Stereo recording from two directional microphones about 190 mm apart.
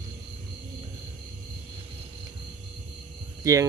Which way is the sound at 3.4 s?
15° right (ahead or behind).